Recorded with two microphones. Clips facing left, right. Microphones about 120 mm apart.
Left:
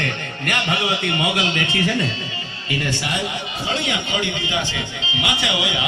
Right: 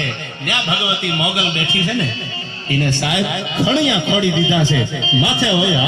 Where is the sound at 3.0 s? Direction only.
85° right.